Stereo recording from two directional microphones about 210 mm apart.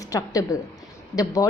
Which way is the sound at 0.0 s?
15° left (ahead or behind).